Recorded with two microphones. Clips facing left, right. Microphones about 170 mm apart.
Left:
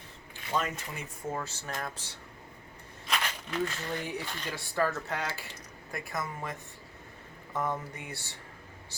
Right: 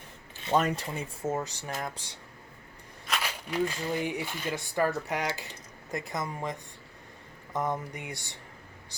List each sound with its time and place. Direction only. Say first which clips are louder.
0.5 s speech: right 6 dB; 40° right (ahead or behind)
1.2 s speech: right 4 dB; 20° right (ahead or behind)
3.1 s speech: right 1 dB; 10° right (ahead or behind)